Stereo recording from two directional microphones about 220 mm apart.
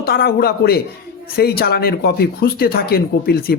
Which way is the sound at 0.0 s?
45° left (ahead or behind).